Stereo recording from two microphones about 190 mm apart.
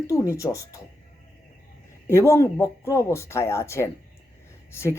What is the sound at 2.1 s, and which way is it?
Speech, 15° left (ahead or behind).